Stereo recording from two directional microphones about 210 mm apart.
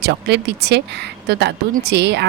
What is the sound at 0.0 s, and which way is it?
Speech, 55° right (ahead or behind).